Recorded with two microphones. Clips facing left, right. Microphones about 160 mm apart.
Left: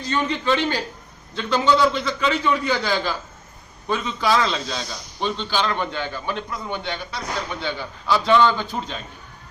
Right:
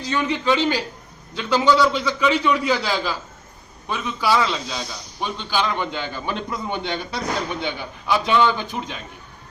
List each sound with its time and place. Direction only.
0.0 s a man's voice: 10° right (ahead or behind)